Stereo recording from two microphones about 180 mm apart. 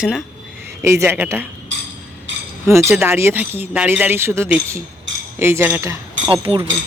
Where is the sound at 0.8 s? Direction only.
15° right (ahead or behind).